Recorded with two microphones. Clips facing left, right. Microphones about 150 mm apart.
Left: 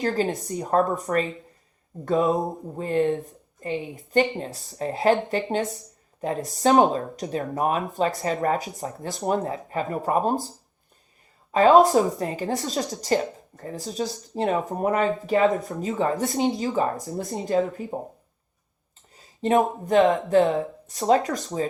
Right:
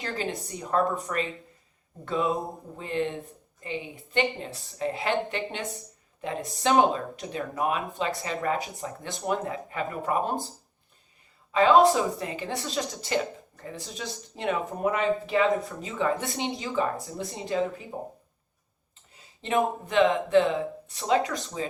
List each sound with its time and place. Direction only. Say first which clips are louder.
0.0 s speech: left 8 dB; 45° left (ahead or behind)
11.5 s speech: left 3 dB; 45° left (ahead or behind)
19.1 s a sound: left 6 dB; 40° left (ahead or behind)
19.8 s speech: left 4 dB; 40° left (ahead or behind)